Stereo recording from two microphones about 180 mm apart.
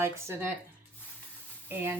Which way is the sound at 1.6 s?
10° right (ahead or behind).